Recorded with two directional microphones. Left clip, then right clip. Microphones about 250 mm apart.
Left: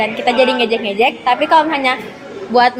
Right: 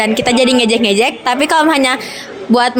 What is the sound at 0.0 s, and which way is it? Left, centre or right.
A woman's voice, right.